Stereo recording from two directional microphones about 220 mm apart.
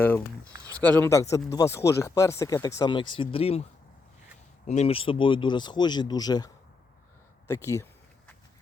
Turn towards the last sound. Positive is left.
turn(degrees=15)  # may be behind; listen again after turning